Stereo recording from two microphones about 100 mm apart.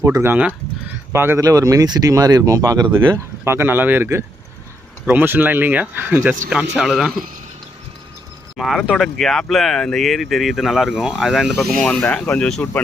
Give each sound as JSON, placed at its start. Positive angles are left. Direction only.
{"t": 0.0, "sound": "speech", "side_deg": -25}
{"t": 1.4, "sound": "speech", "side_deg": -35}
{"t": 3.4, "sound": "speech", "side_deg": -25}
{"t": 6.7, "sound": "speech", "side_deg": 0}
{"t": 8.5, "sound": "speech", "side_deg": -5}